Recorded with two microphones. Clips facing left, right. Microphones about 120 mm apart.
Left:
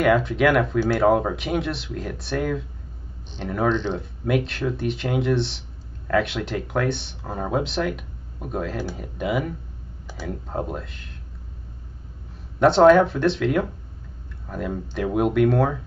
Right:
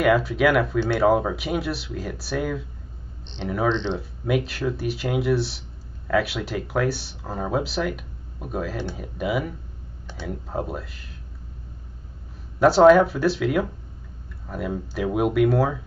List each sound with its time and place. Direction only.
0.0 s speech: 5° right (ahead or behind)
12.5 s speech: 5° right (ahead or behind)